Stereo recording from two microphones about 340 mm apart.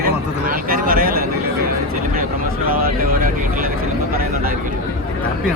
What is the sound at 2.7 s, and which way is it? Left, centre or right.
Speech, right.